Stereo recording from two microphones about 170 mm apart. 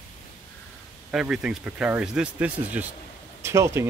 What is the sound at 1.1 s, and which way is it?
Speech, 5° right (ahead or behind).